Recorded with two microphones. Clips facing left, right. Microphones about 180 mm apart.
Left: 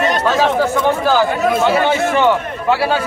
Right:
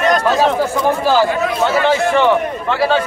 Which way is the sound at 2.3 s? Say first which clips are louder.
Even; 5° left (ahead or behind).